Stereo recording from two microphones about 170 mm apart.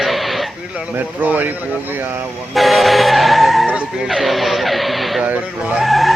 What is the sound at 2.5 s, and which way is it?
Speech, centre (ahead or behind).